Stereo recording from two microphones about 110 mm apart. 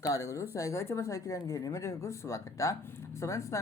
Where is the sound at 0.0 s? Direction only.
30° left (ahead or behind).